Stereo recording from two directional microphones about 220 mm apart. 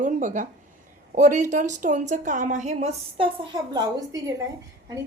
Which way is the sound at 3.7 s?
20° right (ahead or behind).